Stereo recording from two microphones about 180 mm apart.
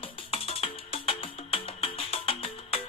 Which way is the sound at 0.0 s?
35° left (ahead or behind).